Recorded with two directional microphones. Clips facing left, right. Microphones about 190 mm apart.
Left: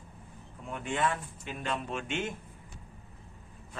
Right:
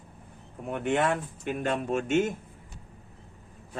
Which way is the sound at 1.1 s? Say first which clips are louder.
Right 8 dB; 50° right (ahead or behind).